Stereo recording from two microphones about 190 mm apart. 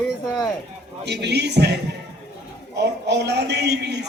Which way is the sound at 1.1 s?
60° right (ahead or behind).